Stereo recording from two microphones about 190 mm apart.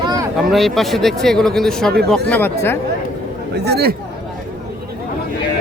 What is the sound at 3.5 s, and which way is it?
Speech, 60° right (ahead or behind).